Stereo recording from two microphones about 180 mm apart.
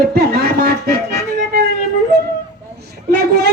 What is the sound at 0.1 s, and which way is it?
Music, 60° right (ahead or behind).